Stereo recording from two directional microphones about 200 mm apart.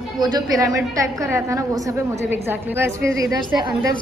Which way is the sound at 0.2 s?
20° right (ahead or behind).